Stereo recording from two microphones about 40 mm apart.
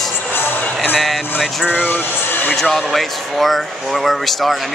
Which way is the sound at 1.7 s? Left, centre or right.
Left.